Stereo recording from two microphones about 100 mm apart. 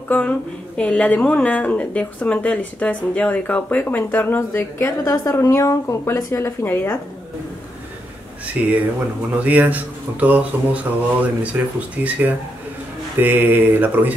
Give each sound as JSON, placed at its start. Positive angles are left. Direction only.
{"t": 0.7, "sound": "a woman's voice", "side_deg": 10}
{"t": 6.6, "sound": "a woman's voice", "side_deg": 20}
{"t": 8.6, "sound": "speech", "side_deg": -10}
{"t": 13.2, "sound": "mantra", "side_deg": -20}